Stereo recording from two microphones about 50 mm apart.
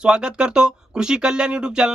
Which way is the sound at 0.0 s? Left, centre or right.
Centre.